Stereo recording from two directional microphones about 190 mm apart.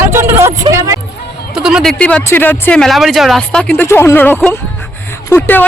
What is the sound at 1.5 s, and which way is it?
Speech, 5° right (ahead or behind).